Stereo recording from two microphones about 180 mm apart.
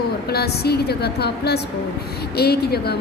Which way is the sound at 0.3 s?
60° left (ahead or behind).